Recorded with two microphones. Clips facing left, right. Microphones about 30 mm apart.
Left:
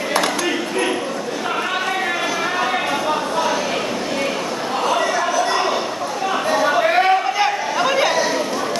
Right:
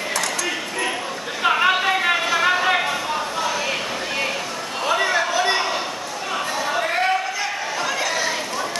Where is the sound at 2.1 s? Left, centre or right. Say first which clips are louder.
Right 1 dB; centre.